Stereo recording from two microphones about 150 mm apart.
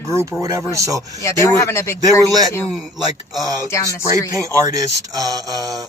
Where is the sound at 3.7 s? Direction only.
20° left (ahead or behind).